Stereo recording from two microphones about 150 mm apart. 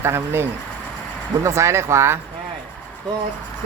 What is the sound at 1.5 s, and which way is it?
Speech, 20° right (ahead or behind).